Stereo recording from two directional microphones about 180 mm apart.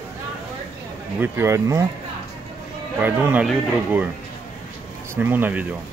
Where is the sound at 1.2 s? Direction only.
15° right (ahead or behind).